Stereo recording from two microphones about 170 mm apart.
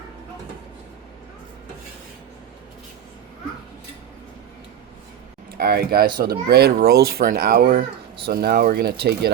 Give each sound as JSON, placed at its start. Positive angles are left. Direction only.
{"t": 5.5, "sound": "speech", "side_deg": -65}